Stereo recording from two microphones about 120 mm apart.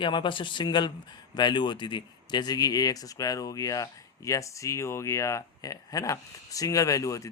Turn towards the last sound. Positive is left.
turn(degrees=25)  # may be behind; listen again after turning